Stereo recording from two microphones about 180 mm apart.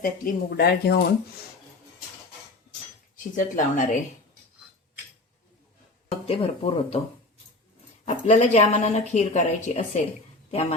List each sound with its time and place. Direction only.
0.0 s speech: 55° left (ahead or behind)
3.3 s speech: 45° left (ahead or behind)
6.2 s speech: 35° left (ahead or behind)
8.0 s speech: 40° left (ahead or behind)